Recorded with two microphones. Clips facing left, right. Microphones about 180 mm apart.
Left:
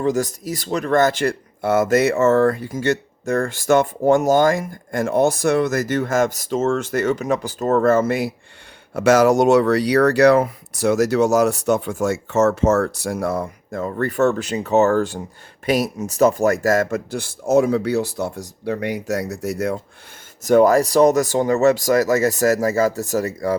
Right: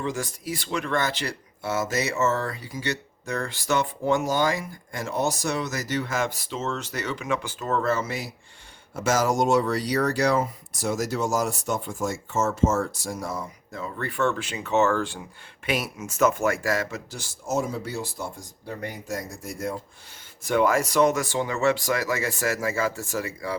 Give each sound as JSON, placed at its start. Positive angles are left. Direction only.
{"t": 0.0, "sound": "speech", "side_deg": 40}
{"t": 8.9, "sound": "speech", "side_deg": 65}
{"t": 20.4, "sound": "speech", "side_deg": 40}